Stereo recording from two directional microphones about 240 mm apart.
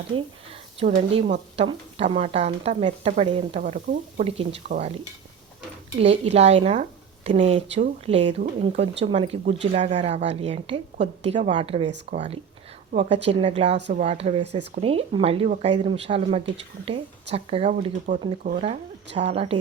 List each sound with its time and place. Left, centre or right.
0.8 s a woman's voice: right
6.0 s a woman's voice: right